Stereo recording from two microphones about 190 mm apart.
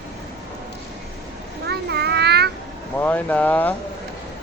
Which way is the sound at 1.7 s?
60° right (ahead or behind).